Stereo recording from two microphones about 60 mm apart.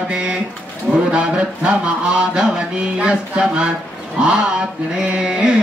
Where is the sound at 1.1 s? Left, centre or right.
Centre.